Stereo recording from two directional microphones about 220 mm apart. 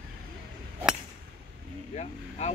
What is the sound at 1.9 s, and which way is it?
Vehicle, 30° left (ahead or behind).